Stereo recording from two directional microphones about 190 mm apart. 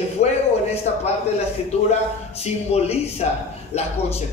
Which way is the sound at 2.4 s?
35° left (ahead or behind).